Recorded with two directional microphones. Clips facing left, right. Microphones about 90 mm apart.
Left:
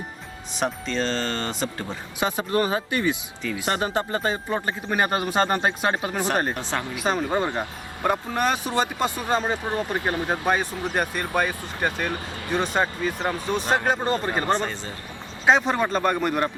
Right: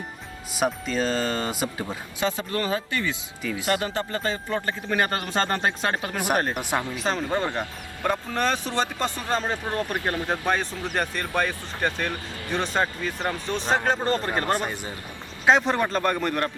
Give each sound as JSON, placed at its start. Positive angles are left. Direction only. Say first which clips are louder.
{"t": 0.5, "sound": "speech", "louder": "right 1 dB", "side_deg": -5}
{"t": 2.1, "sound": "speech", "louder": "left 4 dB", "side_deg": 20}
{"t": 6.5, "sound": "speech", "louder": "right 1 dB", "side_deg": -15}
{"t": 6.9, "sound": "speech", "louder": "left 2 dB", "side_deg": 10}
{"t": 14.5, "sound": "speech", "louder": "left 2 dB", "side_deg": -15}
{"t": 15.4, "sound": "speech", "louder": "even", "side_deg": 5}